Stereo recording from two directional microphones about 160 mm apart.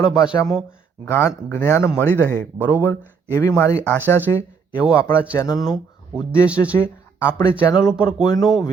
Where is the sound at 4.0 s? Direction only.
10° right (ahead or behind).